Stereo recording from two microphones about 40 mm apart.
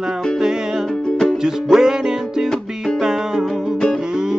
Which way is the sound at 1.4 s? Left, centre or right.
Centre.